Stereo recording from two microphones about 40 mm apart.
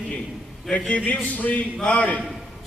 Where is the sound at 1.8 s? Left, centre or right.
Left.